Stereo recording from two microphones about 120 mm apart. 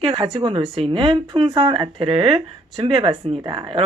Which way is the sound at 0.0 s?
45° right (ahead or behind).